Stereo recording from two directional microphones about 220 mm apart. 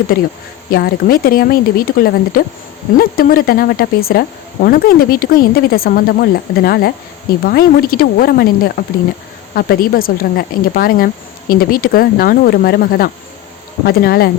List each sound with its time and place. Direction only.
0.7 s speech: 45° left (ahead or behind)